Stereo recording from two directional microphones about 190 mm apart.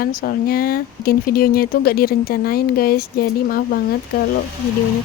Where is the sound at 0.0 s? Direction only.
50° left (ahead or behind).